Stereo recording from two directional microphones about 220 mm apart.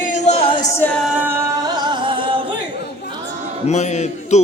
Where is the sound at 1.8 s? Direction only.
20° right (ahead or behind).